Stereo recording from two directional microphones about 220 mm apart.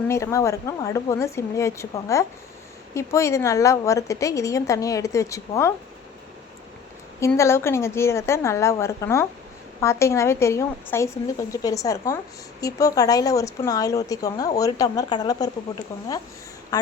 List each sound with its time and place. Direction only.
0.1 s speech: 15° left (ahead or behind)
7.2 s speech: 10° left (ahead or behind)
16.7 s speech: 20° left (ahead or behind)